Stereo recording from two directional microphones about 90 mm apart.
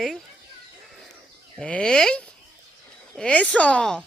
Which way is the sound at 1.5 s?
10° left (ahead or behind).